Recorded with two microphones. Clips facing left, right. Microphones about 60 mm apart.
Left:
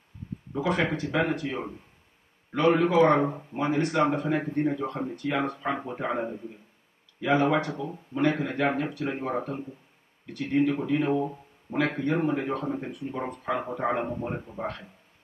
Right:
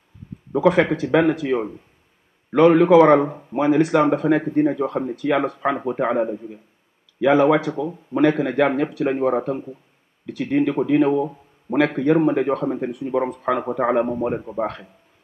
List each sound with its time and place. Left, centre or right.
0.5 s speech: right
10.2 s speech: right
11.7 s speech: right
12.2 s speech: right